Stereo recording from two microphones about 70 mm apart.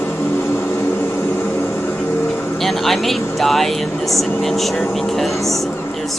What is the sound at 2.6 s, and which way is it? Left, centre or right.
Speech, centre.